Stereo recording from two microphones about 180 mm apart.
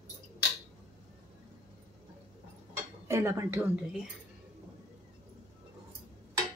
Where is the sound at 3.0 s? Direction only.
15° right (ahead or behind).